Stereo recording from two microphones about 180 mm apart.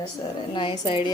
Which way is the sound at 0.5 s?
25° left (ahead or behind).